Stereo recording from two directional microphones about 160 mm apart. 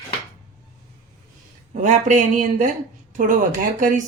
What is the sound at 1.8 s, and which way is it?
A woman's voice, 50° right (ahead or behind).